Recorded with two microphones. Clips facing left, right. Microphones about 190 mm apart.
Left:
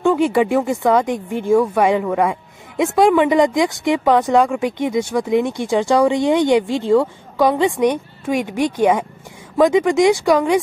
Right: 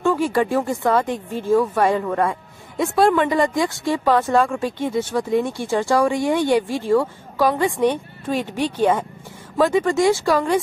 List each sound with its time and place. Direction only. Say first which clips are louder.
0.0 s speech: left 4 dB; 15° left (ahead or behind)